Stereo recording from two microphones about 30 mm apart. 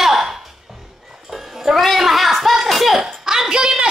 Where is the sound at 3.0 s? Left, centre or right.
Centre.